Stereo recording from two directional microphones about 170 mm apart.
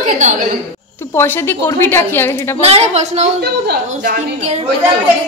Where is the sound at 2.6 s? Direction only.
40° right (ahead or behind).